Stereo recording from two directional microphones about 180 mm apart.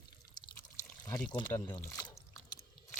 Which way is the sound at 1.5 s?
15° left (ahead or behind).